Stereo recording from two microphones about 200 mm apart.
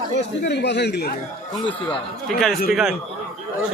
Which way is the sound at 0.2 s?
60° left (ahead or behind).